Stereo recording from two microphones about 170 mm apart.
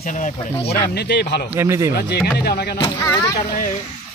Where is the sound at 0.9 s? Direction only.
90° left.